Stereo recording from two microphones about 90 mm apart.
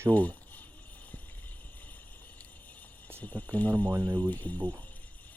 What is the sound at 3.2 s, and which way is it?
Speech, 20° left (ahead or behind).